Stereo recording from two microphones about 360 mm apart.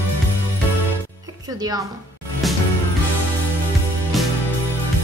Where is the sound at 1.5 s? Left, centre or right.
Centre.